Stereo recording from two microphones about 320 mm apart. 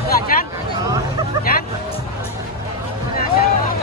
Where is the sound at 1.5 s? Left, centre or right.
Left.